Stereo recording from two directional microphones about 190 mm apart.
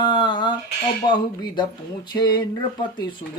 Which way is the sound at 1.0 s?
25° left (ahead or behind).